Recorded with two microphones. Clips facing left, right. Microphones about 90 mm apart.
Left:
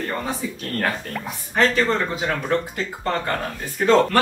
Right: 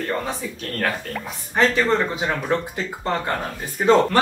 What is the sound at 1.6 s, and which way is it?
Speech, 15° right (ahead or behind).